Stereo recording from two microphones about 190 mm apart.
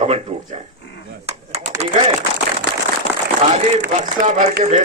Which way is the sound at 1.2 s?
35° right (ahead or behind).